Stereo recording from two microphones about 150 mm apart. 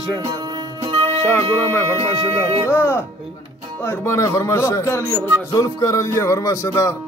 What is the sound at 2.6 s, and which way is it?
Speech, 15° left (ahead or behind).